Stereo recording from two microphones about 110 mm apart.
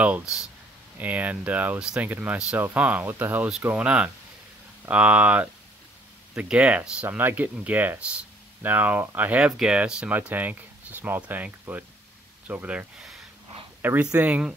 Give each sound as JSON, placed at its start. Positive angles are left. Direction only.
{"t": 0.0, "sound": "speech", "side_deg": -10}
{"t": 14.1, "sound": "speech", "side_deg": -15}